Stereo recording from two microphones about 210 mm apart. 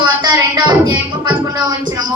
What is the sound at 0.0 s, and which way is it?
Music, 20° right (ahead or behind).